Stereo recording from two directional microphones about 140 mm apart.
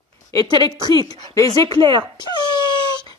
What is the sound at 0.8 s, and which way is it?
Speech, 30° left (ahead or behind).